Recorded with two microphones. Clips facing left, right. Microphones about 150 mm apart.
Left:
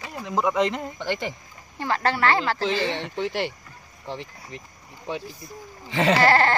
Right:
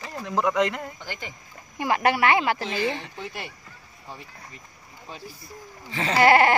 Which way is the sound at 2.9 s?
80° left.